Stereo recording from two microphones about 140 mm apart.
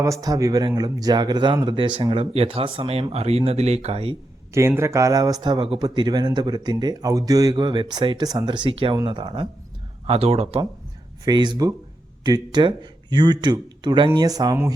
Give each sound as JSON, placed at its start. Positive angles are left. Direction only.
{"t": 0.0, "sound": "speech", "side_deg": -25}
{"t": 4.5, "sound": "speech", "side_deg": -20}
{"t": 10.1, "sound": "speech", "side_deg": -45}
{"t": 11.3, "sound": "speech", "side_deg": -30}